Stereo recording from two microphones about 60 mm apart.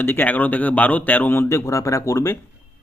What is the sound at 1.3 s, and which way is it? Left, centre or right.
Speech, left.